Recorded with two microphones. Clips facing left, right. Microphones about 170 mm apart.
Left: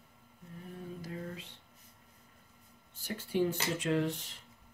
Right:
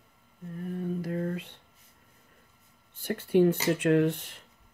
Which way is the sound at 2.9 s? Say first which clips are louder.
Right 9 dB; 60° right (ahead or behind).